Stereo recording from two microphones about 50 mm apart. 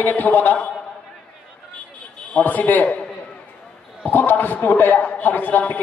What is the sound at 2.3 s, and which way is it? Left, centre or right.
Speech, left.